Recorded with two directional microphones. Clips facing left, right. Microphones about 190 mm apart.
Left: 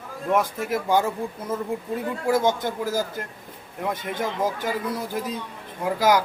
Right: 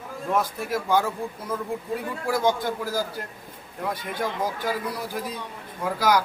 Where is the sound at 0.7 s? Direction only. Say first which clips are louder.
Left 1 dB; 20° left (ahead or behind).